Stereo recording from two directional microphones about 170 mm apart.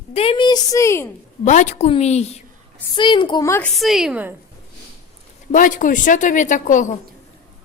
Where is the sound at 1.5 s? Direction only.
45° left (ahead or behind).